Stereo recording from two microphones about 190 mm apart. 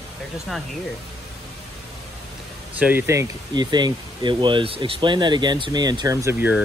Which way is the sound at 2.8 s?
10° right (ahead or behind).